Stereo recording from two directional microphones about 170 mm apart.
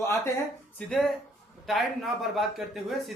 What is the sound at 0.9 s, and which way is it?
A man's voice, centre (ahead or behind).